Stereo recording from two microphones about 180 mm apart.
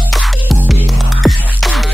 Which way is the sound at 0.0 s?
Centre (ahead or behind).